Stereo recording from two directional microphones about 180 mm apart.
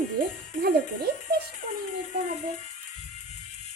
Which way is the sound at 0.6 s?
60° right (ahead or behind).